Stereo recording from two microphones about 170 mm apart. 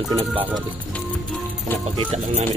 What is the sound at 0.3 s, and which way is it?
Speech, 10° right (ahead or behind).